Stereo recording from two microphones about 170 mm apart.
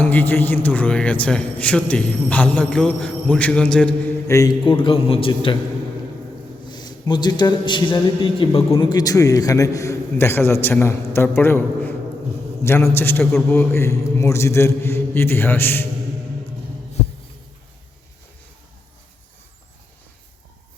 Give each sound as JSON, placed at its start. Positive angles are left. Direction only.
{"t": 0.0, "sound": "a man's voice", "side_deg": 10}
{"t": 4.3, "sound": "a man's voice", "side_deg": 20}
{"t": 4.6, "sound": "a man's voice", "side_deg": 30}
{"t": 6.7, "sound": "a man's voice", "side_deg": 25}